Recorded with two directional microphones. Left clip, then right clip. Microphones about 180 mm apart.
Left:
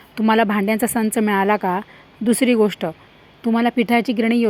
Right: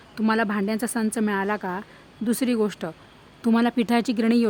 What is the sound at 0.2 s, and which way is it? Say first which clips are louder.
Speech: left 7 dB; 15° left (ahead or behind).